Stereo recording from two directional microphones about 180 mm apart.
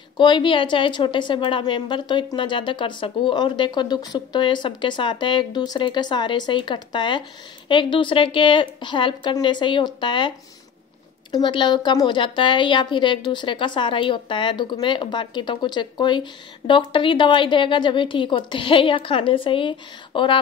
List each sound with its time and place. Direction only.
0.2 s a woman's voice: 25° left (ahead or behind)
11.3 s a woman's voice: 25° left (ahead or behind)